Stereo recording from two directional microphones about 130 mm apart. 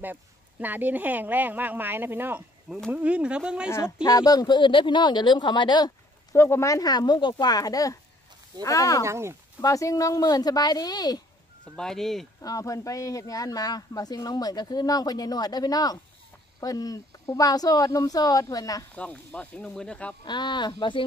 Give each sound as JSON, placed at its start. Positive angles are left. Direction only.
{"t": 0.0, "sound": "speech", "side_deg": -15}
{"t": 3.7, "sound": "speech", "side_deg": 25}
{"t": 6.3, "sound": "speech", "side_deg": 20}
{"t": 9.0, "sound": "speech", "side_deg": -20}
{"t": 9.6, "sound": "speech", "side_deg": 25}
{"t": 11.7, "sound": "speech", "side_deg": 5}
{"t": 12.4, "sound": "speech", "side_deg": 25}
{"t": 18.9, "sound": "speech", "side_deg": 10}
{"t": 20.2, "sound": "speech", "side_deg": 35}